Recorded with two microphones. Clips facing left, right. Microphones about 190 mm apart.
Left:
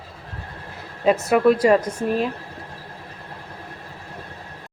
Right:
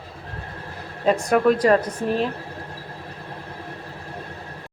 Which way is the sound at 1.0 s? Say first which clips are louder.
Left 2 dB; 5° left (ahead or behind).